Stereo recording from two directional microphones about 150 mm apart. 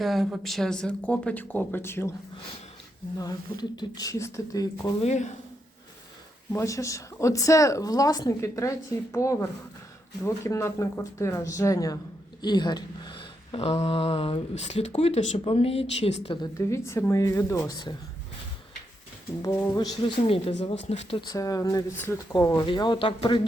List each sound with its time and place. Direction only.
0.0 s speech: centre (ahead or behind); by 2.1 s 15° left (ahead or behind)
3.2 s speech: 25° left (ahead or behind)
4.9 s a woman's voice: 50° left (ahead or behind)
6.5 s a woman's voice: 20° left (ahead or behind); by 16.4 s 45° left (ahead or behind)
16.4 s speech: 20° left (ahead or behind)
19.4 s speech: 20° left (ahead or behind)
20.2 s speech: 45° left (ahead or behind)
21.2 s speech: 25° left (ahead or behind)